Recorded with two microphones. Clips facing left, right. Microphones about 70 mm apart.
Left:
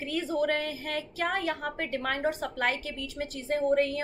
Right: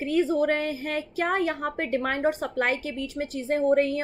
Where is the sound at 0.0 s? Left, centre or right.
Right.